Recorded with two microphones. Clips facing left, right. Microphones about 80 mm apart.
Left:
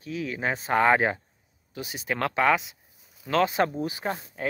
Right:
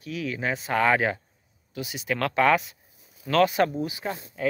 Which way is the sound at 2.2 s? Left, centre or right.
Centre.